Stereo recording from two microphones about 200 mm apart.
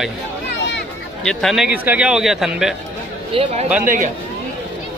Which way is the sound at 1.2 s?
Centre (ahead or behind).